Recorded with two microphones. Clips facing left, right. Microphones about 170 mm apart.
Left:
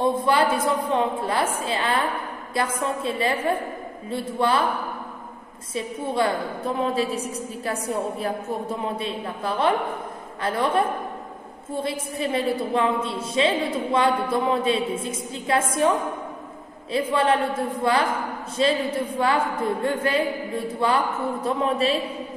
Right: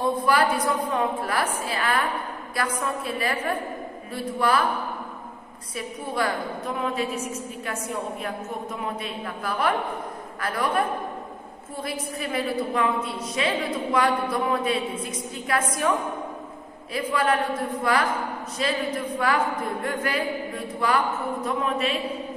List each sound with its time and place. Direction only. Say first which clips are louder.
0.0 s speech: left 2 dB; 25° left (ahead or behind)
5.8 s speech: left 4 dB; 25° left (ahead or behind)
17.1 s speech: left 1 dB; 25° left (ahead or behind)